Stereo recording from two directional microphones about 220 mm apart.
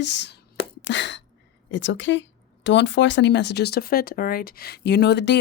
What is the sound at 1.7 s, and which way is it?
Speech, 55° left (ahead or behind).